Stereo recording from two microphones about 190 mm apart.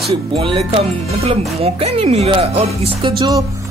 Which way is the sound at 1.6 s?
30° right (ahead or behind).